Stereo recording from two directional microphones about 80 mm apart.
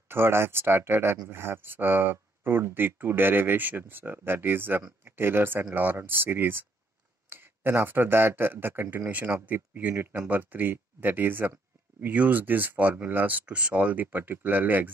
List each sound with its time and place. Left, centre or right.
0.1 s speech: right